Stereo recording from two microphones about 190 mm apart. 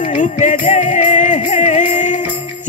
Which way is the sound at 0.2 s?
40° left (ahead or behind).